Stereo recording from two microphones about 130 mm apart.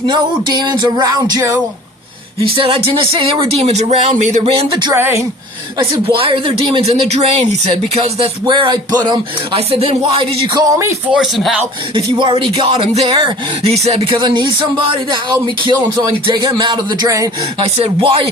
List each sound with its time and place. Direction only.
0.0 s music: 35° right (ahead or behind)
2.6 s speech: 45° right (ahead or behind)
4.9 s a woman's voice: 15° right (ahead or behind)
5.8 s speech: 45° right (ahead or behind)
9.0 s music: 35° right (ahead or behind)
9.6 s speech: 45° right (ahead or behind)
10.5 s speech: 25° right (ahead or behind)
11.1 s speech: centre (ahead or behind)
12.2 s music: 40° right (ahead or behind)
13.2 s speech: 50° right (ahead or behind)
14.1 s music: 35° right (ahead or behind)
16.2 s music: 30° right (ahead or behind)
17.6 s speech: 45° right (ahead or behind)